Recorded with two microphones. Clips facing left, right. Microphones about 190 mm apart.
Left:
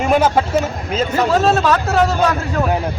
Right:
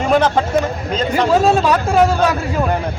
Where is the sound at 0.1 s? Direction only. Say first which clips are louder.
Right 1 dB; 5° left (ahead or behind).